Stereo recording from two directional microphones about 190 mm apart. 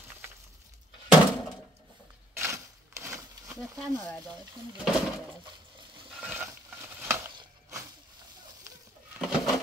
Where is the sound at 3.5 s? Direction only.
5° left (ahead or behind).